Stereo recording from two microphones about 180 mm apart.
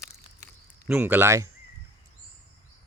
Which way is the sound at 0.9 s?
10° right (ahead or behind).